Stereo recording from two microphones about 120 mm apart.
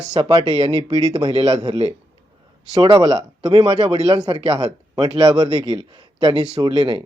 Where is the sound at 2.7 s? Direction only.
35° right (ahead or behind).